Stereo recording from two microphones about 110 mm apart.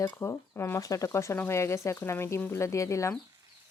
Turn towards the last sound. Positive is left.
turn(degrees=25)  # may be behind; listen again after turning